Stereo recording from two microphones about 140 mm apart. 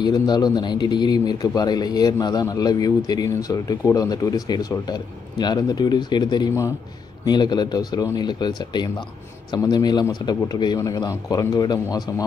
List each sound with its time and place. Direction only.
0.0 s a man's voice: 30° left (ahead or behind)